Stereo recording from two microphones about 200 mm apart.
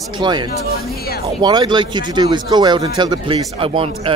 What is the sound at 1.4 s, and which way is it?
Speech, 20° right (ahead or behind).